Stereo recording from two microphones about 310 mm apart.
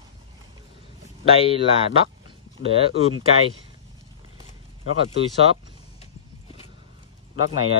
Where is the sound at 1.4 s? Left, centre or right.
Centre.